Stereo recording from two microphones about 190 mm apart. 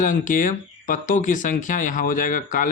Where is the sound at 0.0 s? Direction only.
45° left (ahead or behind).